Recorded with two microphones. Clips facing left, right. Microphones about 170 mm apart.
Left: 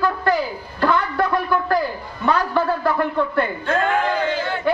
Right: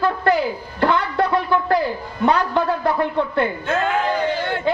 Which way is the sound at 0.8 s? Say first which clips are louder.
Right 1 dB; 25° right (ahead or behind).